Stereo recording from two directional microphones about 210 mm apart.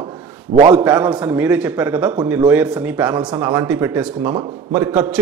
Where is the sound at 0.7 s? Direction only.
15° right (ahead or behind).